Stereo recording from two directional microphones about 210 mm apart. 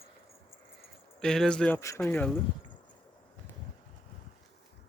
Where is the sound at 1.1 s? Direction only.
Centre (ahead or behind).